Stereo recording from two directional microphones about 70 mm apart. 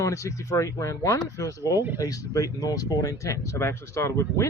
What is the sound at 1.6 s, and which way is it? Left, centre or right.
Speech, right.